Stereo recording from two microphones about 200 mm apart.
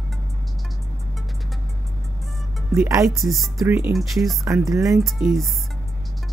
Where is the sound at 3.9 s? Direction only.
Centre (ahead or behind).